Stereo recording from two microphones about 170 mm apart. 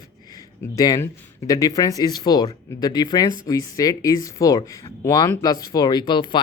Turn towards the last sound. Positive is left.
turn(degrees=25)  # may be behind; listen again after turning